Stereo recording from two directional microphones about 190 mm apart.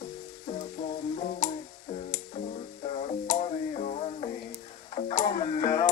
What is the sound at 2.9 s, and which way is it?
Music, 35° left (ahead or behind).